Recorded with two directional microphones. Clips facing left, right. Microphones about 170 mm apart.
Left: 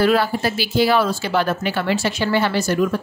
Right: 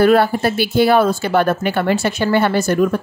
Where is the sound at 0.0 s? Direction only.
55° right (ahead or behind).